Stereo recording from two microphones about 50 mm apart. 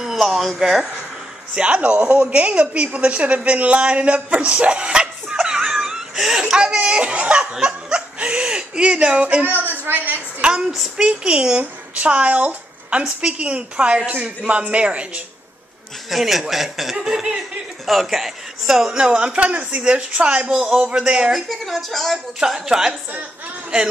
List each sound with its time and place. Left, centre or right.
0.0 s a sound: centre
1.5 s a woman's voice: right
10.4 s a man's voice: centre
16.1 s a woman's voice: centre
19.0 s a woman's voice: right
21.3 s a woman's voice: centre
22.7 s a man's voice: centre